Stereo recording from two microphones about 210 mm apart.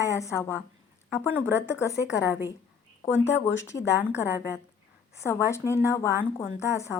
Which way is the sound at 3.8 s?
15° left (ahead or behind).